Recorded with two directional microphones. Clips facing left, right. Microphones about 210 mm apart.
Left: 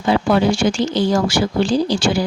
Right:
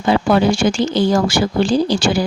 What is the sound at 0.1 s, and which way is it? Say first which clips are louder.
A woman's voice: right 1 dB; 55° right (ahead or behind).